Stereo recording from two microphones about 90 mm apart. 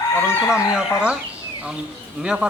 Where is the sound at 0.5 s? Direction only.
10° right (ahead or behind).